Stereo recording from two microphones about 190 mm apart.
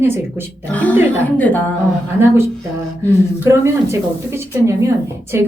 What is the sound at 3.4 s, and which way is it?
A woman's voice, 15° right (ahead or behind).